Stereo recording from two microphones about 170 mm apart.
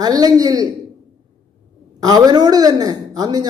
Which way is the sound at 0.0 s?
25° right (ahead or behind).